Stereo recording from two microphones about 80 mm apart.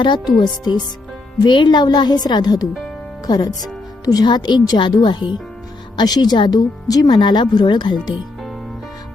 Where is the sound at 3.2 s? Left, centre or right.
Left.